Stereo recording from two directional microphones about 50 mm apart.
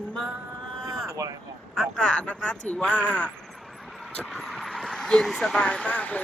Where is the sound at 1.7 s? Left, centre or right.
Centre.